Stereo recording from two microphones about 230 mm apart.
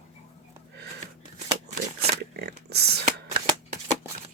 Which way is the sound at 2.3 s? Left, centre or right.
Right.